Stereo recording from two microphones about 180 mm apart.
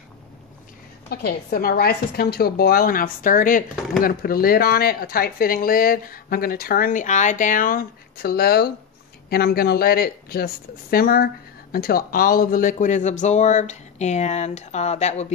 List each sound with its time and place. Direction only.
1.1 s speech: 55° left (ahead or behind); by 15.3 s 40° left (ahead or behind)